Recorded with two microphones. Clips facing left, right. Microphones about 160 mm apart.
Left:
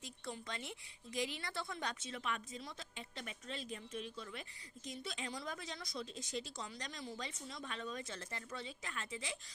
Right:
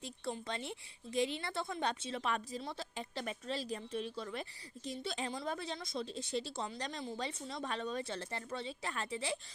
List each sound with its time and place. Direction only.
0.0 s a woman's voice: 30° right (ahead or behind)